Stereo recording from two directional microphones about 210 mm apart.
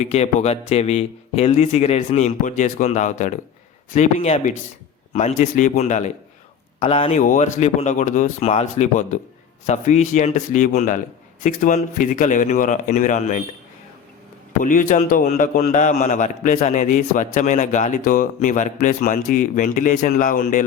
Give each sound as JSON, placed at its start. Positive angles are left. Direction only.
{"t": 0.0, "sound": "a man's voice", "side_deg": 30}
{"t": 14.6, "sound": "a man's voice", "side_deg": 40}